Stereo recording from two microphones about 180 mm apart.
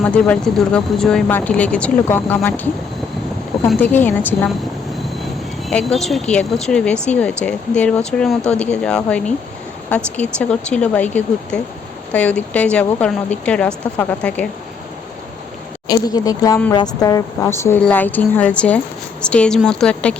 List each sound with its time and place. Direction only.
0.0 s speech: 5° left (ahead or behind)
3.7 s speech: 10° left (ahead or behind)
5.6 s speech: centre (ahead or behind)
15.9 s speech: 20° left (ahead or behind); by 20.1 s 5° left (ahead or behind)